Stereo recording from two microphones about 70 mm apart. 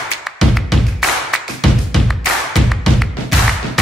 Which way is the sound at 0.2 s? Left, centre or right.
Centre.